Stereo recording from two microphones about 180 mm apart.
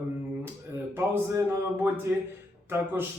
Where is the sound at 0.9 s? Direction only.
10° right (ahead or behind).